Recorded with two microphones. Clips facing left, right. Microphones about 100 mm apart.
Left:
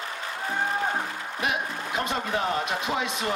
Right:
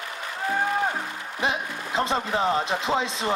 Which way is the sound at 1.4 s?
25° right (ahead or behind).